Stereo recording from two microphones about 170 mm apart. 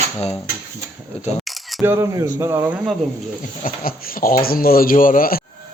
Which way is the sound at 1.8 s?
15° right (ahead or behind).